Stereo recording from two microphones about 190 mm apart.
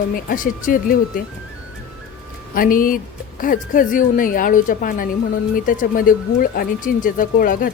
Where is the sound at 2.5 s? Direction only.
45° left (ahead or behind).